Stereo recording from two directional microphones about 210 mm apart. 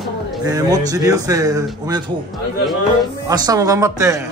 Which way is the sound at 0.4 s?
15° right (ahead or behind).